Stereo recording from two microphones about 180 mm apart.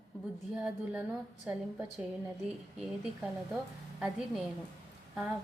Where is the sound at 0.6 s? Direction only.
5° right (ahead or behind).